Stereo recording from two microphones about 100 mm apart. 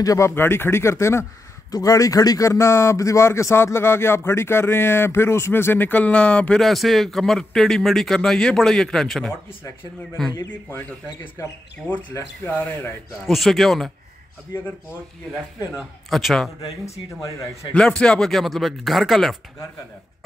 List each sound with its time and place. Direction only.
0.0 s speech: 35° left (ahead or behind)
0.3 s speech: 25° left (ahead or behind); by 10.3 s 5° left (ahead or behind)
12.4 s speech: 15° left (ahead or behind)
13.3 s speech: centre (ahead or behind)
15.7 s speech: centre (ahead or behind)
17.7 s speech: 10° left (ahead or behind)